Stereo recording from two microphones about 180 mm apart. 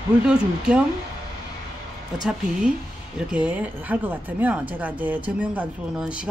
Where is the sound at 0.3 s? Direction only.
5° right (ahead or behind).